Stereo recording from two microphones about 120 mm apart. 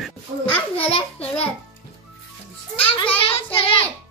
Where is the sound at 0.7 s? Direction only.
55° left (ahead or behind).